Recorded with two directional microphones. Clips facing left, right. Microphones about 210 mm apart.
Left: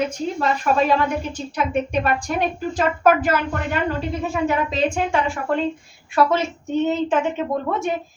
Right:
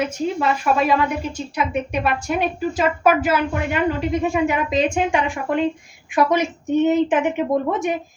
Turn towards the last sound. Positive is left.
turn(degrees=-15)  # may be behind; listen again after turning